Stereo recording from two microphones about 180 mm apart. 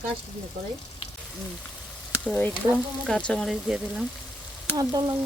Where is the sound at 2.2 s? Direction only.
10° left (ahead or behind).